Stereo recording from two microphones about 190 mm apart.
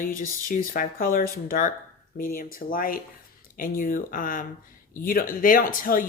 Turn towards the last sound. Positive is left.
turn(degrees=45)  # may be behind; listen again after turning